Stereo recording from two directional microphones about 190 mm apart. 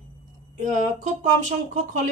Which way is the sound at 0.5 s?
40° right (ahead or behind).